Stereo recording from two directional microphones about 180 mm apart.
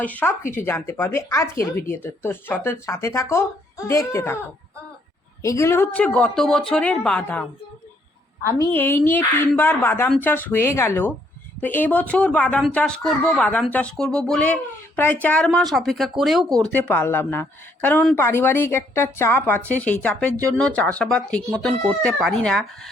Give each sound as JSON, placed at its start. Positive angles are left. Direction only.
{"t": 0.0, "sound": "a woman's voice", "side_deg": 10}
{"t": 5.4, "sound": "a woman's voice", "side_deg": 15}
{"t": 8.5, "sound": "a woman's voice", "side_deg": 15}